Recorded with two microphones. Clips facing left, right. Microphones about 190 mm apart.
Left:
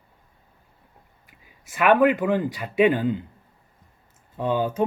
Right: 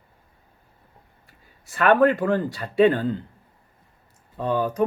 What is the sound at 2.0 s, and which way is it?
Speech, 15° left (ahead or behind).